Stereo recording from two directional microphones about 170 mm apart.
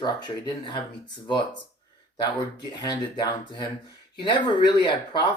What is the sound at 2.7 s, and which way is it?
Speech, 25° left (ahead or behind).